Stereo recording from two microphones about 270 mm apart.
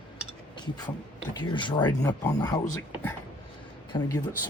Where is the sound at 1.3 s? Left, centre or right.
Centre.